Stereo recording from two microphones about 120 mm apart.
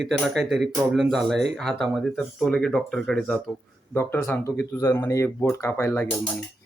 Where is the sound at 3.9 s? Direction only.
20° left (ahead or behind).